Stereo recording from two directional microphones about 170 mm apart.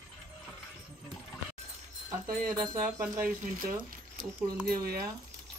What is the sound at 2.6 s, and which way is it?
Speech, 15° right (ahead or behind).